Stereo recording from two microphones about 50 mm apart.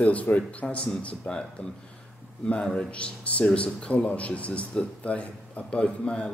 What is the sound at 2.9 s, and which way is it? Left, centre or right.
A man's voice, left.